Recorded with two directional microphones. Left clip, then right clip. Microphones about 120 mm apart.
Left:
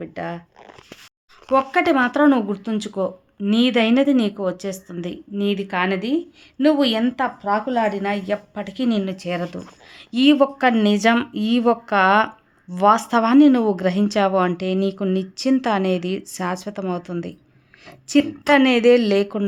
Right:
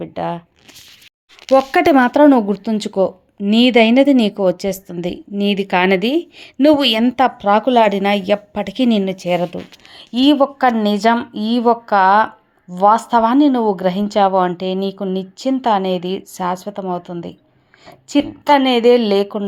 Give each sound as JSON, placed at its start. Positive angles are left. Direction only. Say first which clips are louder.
{"t": 0.0, "sound": "speech", "louder": "right 6 dB", "side_deg": -25}
{"t": 1.7, "sound": "speech", "louder": "right 5 dB", "side_deg": -90}
{"t": 2.0, "sound": "a woman's voice", "louder": "right 6 dB", "side_deg": -40}
{"t": 5.6, "sound": "a woman's voice", "louder": "right 7 dB", "side_deg": -65}
{"t": 7.2, "sound": "a woman's voice", "louder": "right 8 dB", "side_deg": -65}
{"t": 9.1, "sound": "speech", "louder": "right 8 dB", "side_deg": -30}
{"t": 9.9, "sound": "a woman's voice", "louder": "right 2 dB", "side_deg": 0}